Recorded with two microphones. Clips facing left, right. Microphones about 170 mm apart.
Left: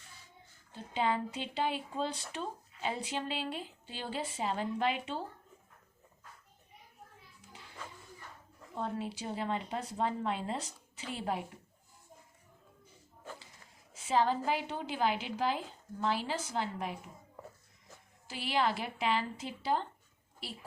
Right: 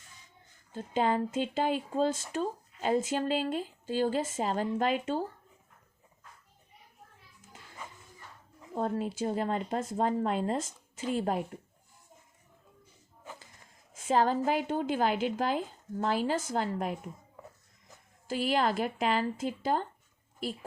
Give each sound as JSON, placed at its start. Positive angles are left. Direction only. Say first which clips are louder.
{"t": 0.7, "sound": "speech", "louder": "right 4 dB", "side_deg": -45}
{"t": 8.7, "sound": "speech", "louder": "right 6 dB", "side_deg": -45}
{"t": 13.9, "sound": "speech", "louder": "right 3 dB", "side_deg": -50}
{"t": 18.3, "sound": "speech", "louder": "right 4 dB", "side_deg": -45}